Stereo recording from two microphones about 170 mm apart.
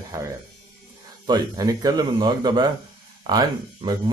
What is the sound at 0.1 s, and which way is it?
Speech, 25° right (ahead or behind).